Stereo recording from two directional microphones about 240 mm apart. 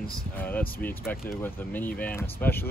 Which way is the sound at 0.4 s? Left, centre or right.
Centre.